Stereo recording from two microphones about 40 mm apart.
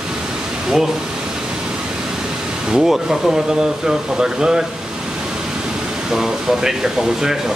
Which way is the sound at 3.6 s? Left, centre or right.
Centre.